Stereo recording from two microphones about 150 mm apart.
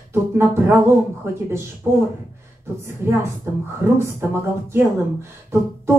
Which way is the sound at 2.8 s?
15° right (ahead or behind).